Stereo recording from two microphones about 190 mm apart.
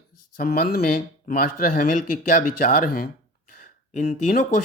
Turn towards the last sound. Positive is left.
turn(degrees=45)  # may be behind; listen again after turning